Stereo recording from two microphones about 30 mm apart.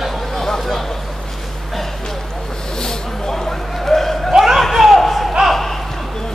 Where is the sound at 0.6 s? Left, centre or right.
Centre.